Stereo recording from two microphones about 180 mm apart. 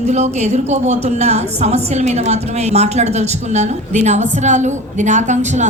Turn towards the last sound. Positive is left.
turn(degrees=-40)  # may be behind; listen again after turning